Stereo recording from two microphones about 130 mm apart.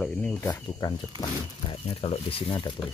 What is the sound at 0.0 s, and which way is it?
Cricket, 15° left (ahead or behind).